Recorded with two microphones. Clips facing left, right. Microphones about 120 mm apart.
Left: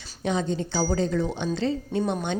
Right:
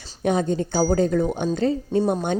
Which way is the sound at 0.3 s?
50° right (ahead or behind).